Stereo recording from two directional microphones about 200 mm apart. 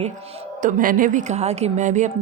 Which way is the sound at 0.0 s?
30° right (ahead or behind).